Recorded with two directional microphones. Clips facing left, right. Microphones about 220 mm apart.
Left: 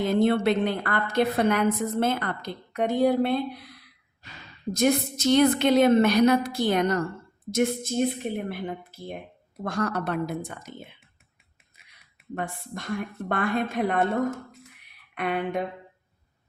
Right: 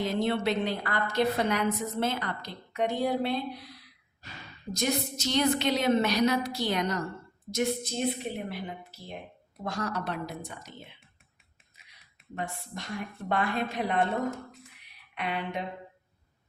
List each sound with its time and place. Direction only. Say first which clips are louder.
0.0 s a woman's voice: left 6 dB; 50° left (ahead or behind)
4.7 s a woman's voice: left 7 dB; 55° left (ahead or behind)
11.8 s a sound: left 1 dB; 55° left (ahead or behind)
12.3 s a woman's voice: left 4 dB; 50° left (ahead or behind)
15.1 s speech: left 6 dB; 50° left (ahead or behind)